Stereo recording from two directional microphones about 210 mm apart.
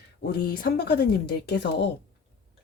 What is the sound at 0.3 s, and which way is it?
Speech, 45° left (ahead or behind).